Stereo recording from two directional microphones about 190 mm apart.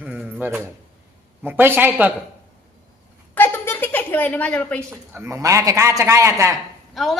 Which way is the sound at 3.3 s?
10° left (ahead or behind).